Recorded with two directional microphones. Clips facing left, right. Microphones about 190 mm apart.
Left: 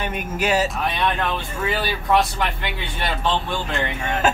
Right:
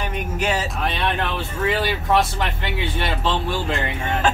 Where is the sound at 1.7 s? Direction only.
25° right (ahead or behind).